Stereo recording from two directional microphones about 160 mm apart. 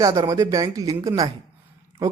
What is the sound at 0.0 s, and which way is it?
Speech, 25° right (ahead or behind).